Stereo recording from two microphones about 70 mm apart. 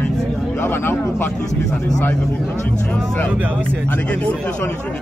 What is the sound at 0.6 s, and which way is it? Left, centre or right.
Speech, left.